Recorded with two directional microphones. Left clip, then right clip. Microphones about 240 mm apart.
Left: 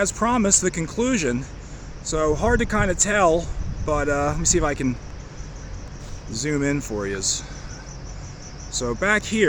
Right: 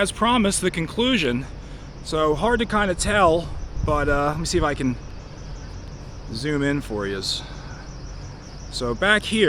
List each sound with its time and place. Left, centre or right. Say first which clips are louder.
0.0 s speech: right 1 dB; centre
6.3 s speech: even; centre
8.8 s speech: right 2 dB; centre